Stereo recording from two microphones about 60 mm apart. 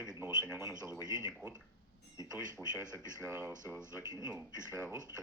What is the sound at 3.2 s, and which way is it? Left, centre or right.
Speech, right.